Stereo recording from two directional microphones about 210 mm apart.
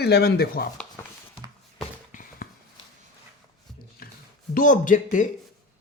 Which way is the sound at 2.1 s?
40° left (ahead or behind).